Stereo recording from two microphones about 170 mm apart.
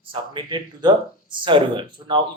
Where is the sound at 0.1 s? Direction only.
30° right (ahead or behind).